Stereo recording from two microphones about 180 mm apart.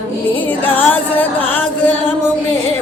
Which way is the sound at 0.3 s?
10° left (ahead or behind).